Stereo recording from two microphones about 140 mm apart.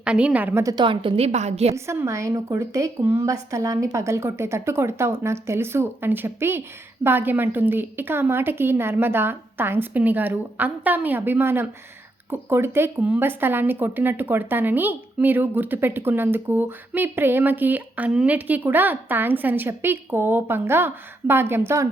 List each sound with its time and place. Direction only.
0.0 s speech: 10° right (ahead or behind)
0.6 s a woman's voice: 25° right (ahead or behind)
0.9 s a woman's voice: 40° right (ahead or behind)
1.7 s a woman's voice: 20° right (ahead or behind)